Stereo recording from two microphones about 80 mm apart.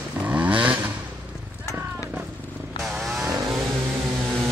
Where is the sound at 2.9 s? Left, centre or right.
Centre.